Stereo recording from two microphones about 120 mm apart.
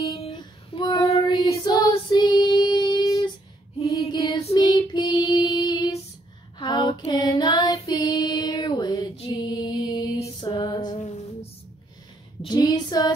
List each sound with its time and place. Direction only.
0.3 s child singing: 40° left (ahead or behind)
1.0 s child singing: 55° left (ahead or behind)
1.6 s child singing: 35° left (ahead or behind)
3.9 s female singing: 35° left (ahead or behind)
4.6 s child singing: 40° left (ahead or behind)
9.4 s music: 40° left (ahead or behind)
12.4 s a sound: 35° left (ahead or behind)